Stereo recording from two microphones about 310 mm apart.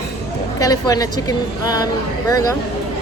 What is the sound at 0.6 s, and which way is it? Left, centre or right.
A woman's voice, centre.